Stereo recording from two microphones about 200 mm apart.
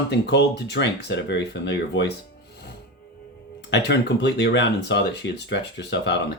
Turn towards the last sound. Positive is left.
turn(degrees=60)  # may be behind; listen again after turning